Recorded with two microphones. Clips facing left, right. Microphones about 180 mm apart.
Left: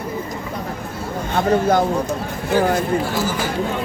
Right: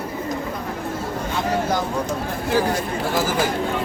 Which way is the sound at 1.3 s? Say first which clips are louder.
Left 7 dB; 55° left (ahead or behind).